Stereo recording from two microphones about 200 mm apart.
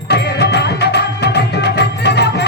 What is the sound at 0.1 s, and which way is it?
Music, 55° left (ahead or behind).